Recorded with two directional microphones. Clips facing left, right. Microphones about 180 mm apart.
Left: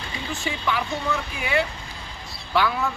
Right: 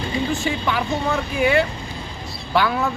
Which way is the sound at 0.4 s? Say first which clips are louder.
Right 4 dB; 50° right (ahead or behind).